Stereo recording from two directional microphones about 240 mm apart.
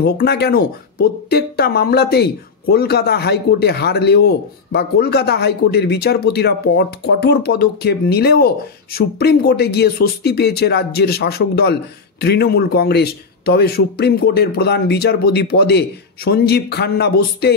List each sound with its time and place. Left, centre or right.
0.0 s speech: left